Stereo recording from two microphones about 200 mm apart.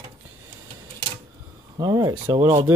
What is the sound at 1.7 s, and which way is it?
Speech, 20° right (ahead or behind).